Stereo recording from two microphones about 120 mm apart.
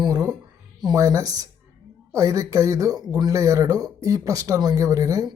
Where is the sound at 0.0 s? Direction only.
30° right (ahead or behind).